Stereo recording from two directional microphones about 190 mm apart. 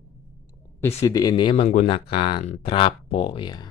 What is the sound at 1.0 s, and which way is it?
Speech, 20° left (ahead or behind).